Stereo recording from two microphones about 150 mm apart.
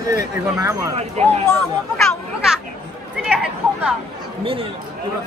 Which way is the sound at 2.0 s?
Centre (ahead or behind).